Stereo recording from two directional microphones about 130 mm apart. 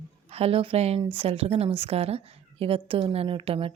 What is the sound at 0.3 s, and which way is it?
Speech, 50° right (ahead or behind).